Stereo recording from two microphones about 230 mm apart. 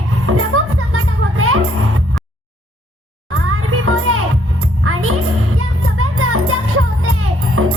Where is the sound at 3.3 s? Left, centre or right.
Right.